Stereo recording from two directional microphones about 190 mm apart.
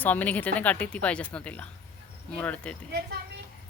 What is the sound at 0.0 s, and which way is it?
Speech, 10° left (ahead or behind).